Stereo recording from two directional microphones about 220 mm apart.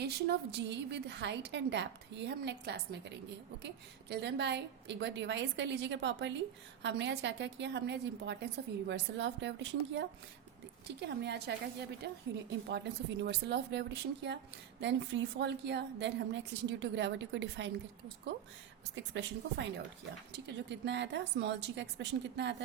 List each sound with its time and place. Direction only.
0.0 s a woman's voice: 50° right (ahead or behind)
4.1 s a woman's voice: 50° right (ahead or behind)
18.9 s a woman's voice: 55° right (ahead or behind)